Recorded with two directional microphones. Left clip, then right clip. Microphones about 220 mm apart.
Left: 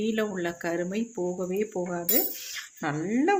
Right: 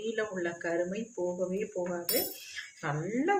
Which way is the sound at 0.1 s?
45° left (ahead or behind).